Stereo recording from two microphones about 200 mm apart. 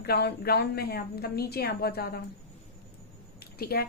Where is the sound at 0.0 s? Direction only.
50° left (ahead or behind).